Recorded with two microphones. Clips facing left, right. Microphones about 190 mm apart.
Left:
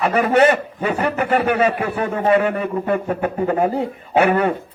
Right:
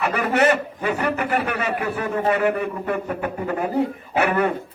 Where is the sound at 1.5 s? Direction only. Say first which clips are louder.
Left 6 dB; 30° left (ahead or behind).